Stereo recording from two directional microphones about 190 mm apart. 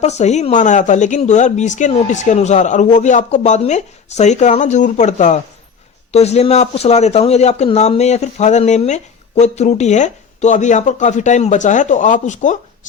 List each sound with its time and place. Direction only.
0.0 s speech: 35° left (ahead or behind)